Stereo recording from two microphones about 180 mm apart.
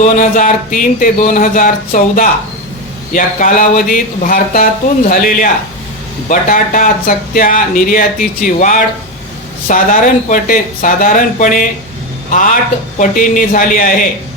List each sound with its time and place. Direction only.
0.0 s speech: 45° left (ahead or behind)